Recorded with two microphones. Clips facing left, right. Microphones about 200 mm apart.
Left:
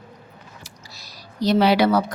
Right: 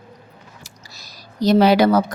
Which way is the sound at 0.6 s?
45° right (ahead or behind).